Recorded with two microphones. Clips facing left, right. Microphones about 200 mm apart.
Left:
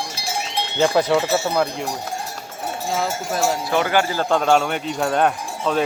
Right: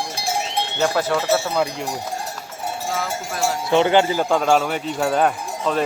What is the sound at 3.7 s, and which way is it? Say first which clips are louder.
Speech: right 7 dB; 25° right (ahead or behind).